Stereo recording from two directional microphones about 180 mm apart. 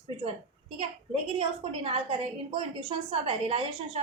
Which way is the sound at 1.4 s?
30° right (ahead or behind).